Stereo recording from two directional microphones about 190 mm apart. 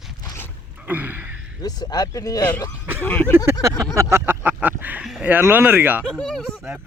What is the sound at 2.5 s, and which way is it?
Speech, 10° left (ahead or behind).